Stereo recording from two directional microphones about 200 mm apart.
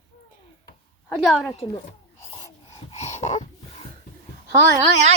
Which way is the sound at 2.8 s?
35° left (ahead or behind).